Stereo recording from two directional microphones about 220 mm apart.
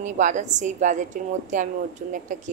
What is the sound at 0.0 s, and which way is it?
A woman's voice, 35° right (ahead or behind).